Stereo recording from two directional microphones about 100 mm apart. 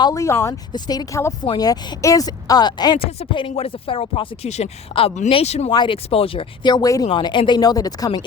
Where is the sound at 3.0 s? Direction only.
65° left (ahead or behind); by 5.6 s 90° left.